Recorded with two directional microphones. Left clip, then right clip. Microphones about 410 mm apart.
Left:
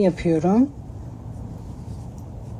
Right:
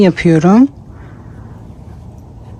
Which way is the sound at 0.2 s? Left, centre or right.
Right.